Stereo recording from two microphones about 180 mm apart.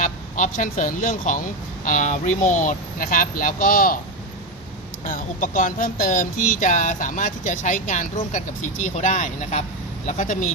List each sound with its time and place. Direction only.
0.0 s speech: 45° left (ahead or behind)
5.0 s speech: 50° left (ahead or behind)